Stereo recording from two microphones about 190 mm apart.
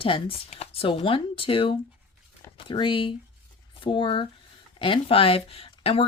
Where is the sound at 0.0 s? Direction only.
30° left (ahead or behind).